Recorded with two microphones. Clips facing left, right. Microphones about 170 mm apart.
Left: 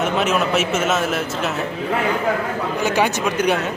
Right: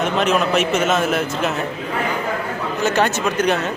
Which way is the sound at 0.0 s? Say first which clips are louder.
Right 1 dB; 5° left (ahead or behind).